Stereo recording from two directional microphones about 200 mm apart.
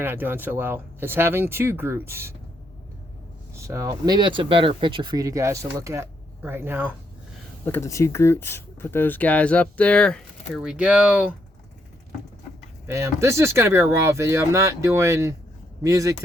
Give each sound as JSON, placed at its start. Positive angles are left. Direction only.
{"t": 0.0, "sound": "speech", "side_deg": -10}
{"t": 3.5, "sound": "speech", "side_deg": -15}
{"t": 7.7, "sound": "speech", "side_deg": 15}
{"t": 12.9, "sound": "speech", "side_deg": -15}